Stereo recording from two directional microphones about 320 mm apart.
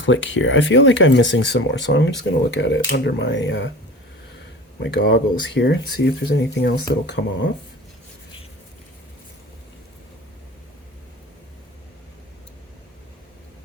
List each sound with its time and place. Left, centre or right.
0.0 s speech: left
4.8 s speech: left